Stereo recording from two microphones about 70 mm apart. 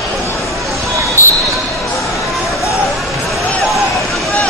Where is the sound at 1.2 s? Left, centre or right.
Left.